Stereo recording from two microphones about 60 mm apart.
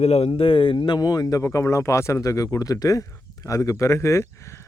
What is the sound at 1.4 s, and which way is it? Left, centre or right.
Speech, left.